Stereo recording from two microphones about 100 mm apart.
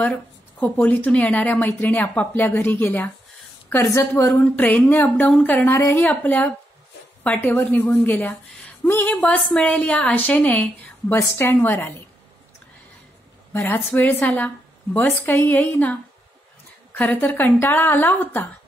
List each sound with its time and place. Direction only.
0.0 s speech: 15° left (ahead or behind)
4.6 s speech: 15° left (ahead or behind)
5.7 s speech: 30° left (ahead or behind)
6.0 s speech: 15° left (ahead or behind)
7.5 s speech: 25° left (ahead or behind)
13.5 s speech: 25° left (ahead or behind)